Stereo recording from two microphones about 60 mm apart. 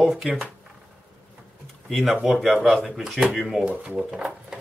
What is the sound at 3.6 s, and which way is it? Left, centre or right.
Speech, centre.